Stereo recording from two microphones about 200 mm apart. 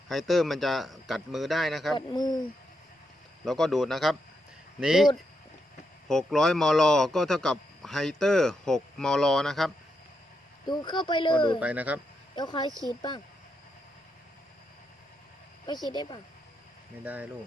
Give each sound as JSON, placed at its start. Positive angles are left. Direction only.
{"t": 0.1, "sound": "speech", "side_deg": 0}
{"t": 2.0, "sound": "speech", "side_deg": 20}
{"t": 3.4, "sound": "speech", "side_deg": 0}
{"t": 10.7, "sound": "speech", "side_deg": 20}
{"t": 11.6, "sound": "speech", "side_deg": -5}
{"t": 12.4, "sound": "speech", "side_deg": 20}
{"t": 15.9, "sound": "speech", "side_deg": 25}
{"t": 17.0, "sound": "speech", "side_deg": -10}